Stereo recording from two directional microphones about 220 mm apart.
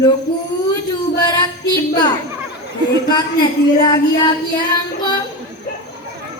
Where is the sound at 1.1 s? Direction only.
20° left (ahead or behind).